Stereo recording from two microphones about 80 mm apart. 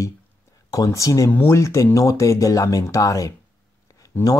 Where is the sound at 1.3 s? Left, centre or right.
Left.